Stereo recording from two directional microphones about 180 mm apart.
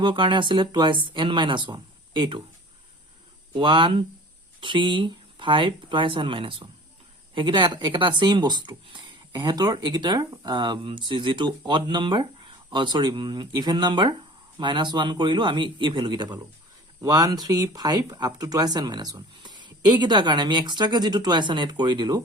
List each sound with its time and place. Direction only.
0.0 s speech: 25° right (ahead or behind)
3.5 s speech: 25° right (ahead or behind)